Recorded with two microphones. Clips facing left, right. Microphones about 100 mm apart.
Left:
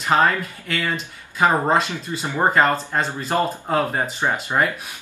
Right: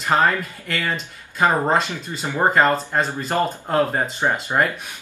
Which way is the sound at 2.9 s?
5° right (ahead or behind).